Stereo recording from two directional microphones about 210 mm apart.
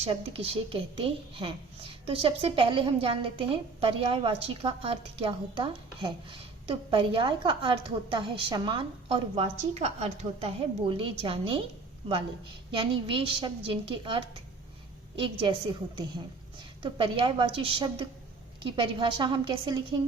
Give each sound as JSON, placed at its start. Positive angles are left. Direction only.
{"t": 0.0, "sound": "a woman's voice", "side_deg": -25}
{"t": 13.1, "sound": "a woman's voice", "side_deg": -25}